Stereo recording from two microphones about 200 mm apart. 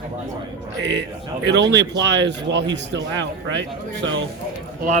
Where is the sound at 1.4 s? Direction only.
60° right (ahead or behind).